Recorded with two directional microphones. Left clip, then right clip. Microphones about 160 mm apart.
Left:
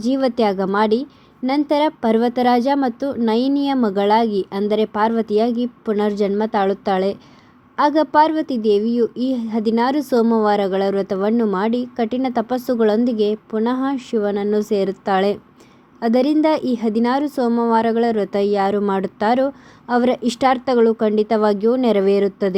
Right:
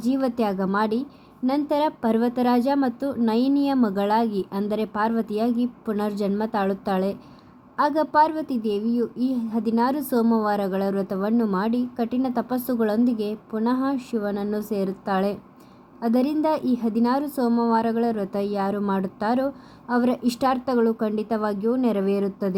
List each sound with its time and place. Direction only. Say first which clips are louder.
0.0 s a woman's voice: left 6 dB; 20° left (ahead or behind)